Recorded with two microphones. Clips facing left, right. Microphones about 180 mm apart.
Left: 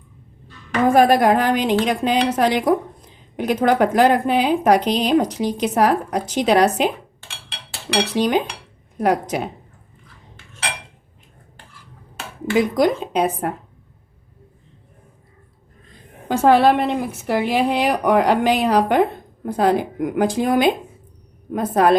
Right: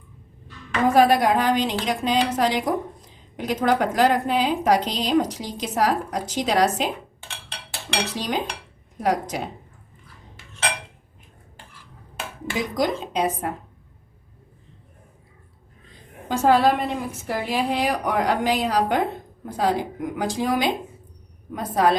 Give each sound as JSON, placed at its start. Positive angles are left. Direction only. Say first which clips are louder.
{"t": 0.9, "sound": "a woman's voice", "louder": "left 3 dB", "side_deg": 50}
{"t": 8.1, "sound": "a woman's voice", "louder": "left 8 dB", "side_deg": 60}
{"t": 12.5, "sound": "a woman's voice", "louder": "left 7 dB", "side_deg": 60}
{"t": 16.3, "sound": "a woman's voice", "louder": "left 4 dB", "side_deg": 65}